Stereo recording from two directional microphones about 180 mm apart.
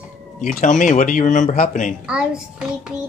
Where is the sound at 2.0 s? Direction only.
5° right (ahead or behind).